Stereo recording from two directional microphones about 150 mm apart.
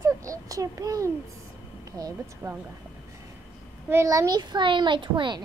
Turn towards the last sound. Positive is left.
turn(degrees=-30)  # may be behind; listen again after turning